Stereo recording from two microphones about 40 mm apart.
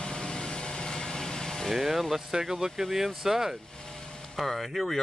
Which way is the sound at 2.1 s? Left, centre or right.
Centre.